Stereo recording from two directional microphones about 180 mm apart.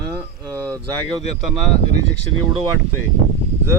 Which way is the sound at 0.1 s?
20° right (ahead or behind).